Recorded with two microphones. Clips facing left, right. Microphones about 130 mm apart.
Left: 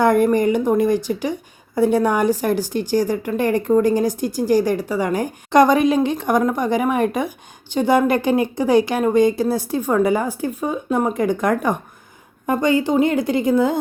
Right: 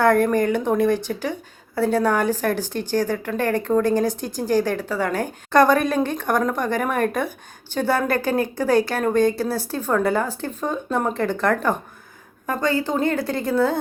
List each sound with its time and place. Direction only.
0.0 s speech: 15° left (ahead or behind)